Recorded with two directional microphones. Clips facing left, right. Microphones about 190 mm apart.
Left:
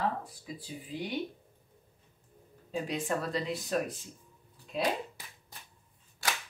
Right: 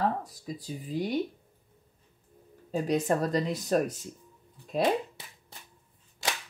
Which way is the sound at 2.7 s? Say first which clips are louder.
Right 6 dB; 40° right (ahead or behind).